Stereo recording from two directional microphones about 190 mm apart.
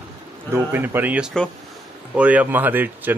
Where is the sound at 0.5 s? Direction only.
10° right (ahead or behind).